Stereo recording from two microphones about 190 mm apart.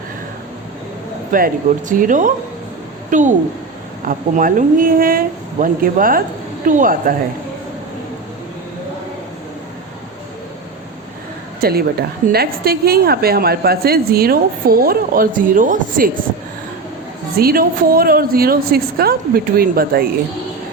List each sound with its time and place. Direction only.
1.3 s a woman's voice: 45° right (ahead or behind)
4.4 s a woman's voice: 45° right (ahead or behind)
11.6 s a woman's voice: 55° right (ahead or behind)
17.3 s a woman's voice: 50° right (ahead or behind)